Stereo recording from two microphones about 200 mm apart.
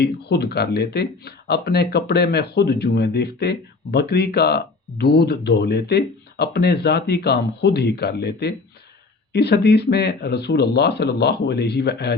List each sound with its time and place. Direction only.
0.0 s speech: 55° left (ahead or behind)